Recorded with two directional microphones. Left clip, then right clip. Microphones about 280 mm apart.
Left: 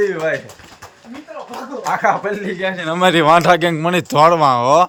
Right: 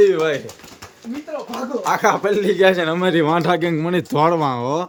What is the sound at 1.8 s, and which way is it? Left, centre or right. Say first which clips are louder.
Speech: left 1 dB; centre.